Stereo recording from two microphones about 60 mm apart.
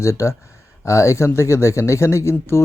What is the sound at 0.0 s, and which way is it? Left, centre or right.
Speech, left.